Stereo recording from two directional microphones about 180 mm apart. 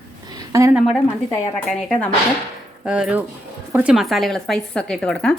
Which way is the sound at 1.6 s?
5° left (ahead or behind).